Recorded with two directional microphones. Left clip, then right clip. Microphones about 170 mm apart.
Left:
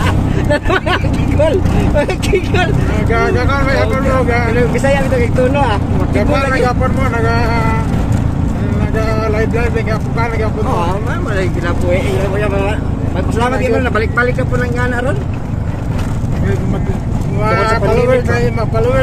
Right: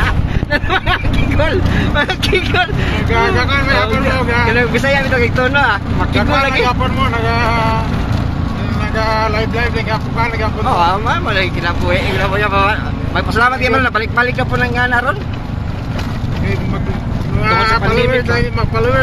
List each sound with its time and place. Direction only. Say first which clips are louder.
0.5 s speech: even; 10° right (ahead or behind)
2.0 s speech: even; 20° right (ahead or behind)
4.6 s speech: even; 20° right (ahead or behind)
10.8 s speech: right 5 dB; 15° right (ahead or behind)